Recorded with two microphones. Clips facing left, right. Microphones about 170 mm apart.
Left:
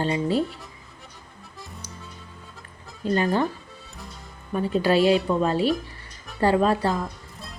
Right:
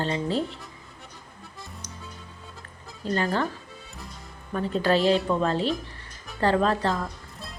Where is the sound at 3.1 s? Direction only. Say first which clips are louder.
Left 3 dB; 15° left (ahead or behind).